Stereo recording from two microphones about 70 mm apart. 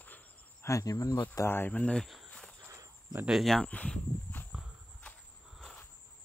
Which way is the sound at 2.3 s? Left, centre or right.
Centre.